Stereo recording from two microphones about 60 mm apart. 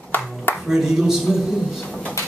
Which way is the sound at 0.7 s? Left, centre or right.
Centre.